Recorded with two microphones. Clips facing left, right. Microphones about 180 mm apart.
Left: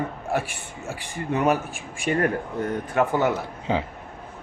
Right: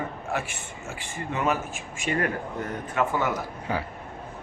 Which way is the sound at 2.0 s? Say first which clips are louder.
Left 4 dB; 50° left (ahead or behind).